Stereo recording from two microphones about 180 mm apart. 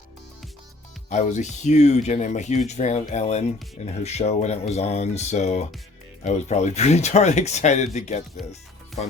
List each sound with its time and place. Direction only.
1.1 s speech: 40° left (ahead or behind)